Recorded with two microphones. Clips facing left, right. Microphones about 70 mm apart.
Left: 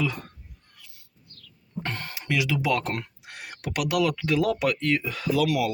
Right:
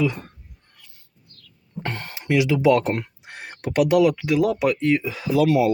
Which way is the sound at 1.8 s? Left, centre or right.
Right.